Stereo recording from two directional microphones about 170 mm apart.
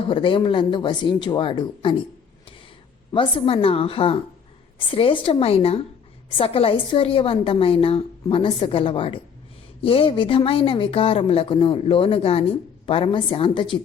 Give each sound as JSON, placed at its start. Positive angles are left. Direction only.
{"t": 0.1, "sound": "speech", "side_deg": 30}
{"t": 3.1, "sound": "speech", "side_deg": 30}